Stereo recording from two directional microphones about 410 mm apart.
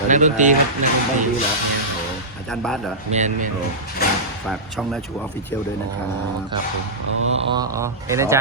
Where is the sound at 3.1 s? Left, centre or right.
Centre.